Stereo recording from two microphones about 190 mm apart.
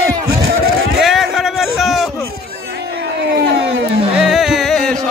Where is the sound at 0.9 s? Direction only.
Centre (ahead or behind).